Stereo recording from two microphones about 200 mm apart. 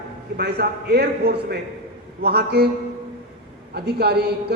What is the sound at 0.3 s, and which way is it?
A man's voice, 50° right (ahead or behind).